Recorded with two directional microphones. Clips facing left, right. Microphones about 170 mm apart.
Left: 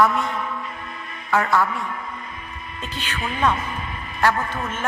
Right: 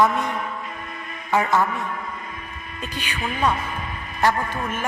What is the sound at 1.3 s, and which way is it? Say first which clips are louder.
Speech: even; 15° right (ahead or behind).